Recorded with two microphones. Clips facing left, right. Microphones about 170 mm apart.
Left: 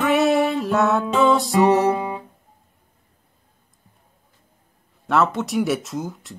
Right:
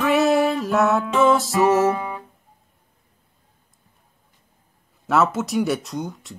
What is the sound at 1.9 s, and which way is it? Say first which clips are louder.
Guitar: left 3 dB; 20° left (ahead or behind).